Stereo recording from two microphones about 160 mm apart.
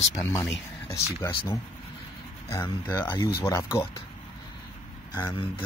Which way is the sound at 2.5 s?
20° left (ahead or behind).